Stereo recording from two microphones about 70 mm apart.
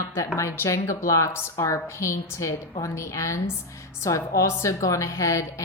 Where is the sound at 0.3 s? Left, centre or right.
Left.